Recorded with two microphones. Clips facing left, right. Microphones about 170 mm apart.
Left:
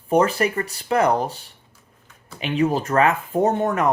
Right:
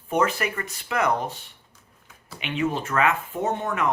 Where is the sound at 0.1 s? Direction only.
35° left (ahead or behind).